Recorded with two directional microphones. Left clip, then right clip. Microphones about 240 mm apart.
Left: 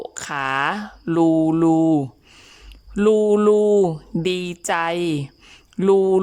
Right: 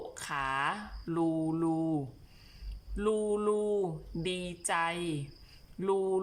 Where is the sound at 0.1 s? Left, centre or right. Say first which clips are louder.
Left 10 dB; left.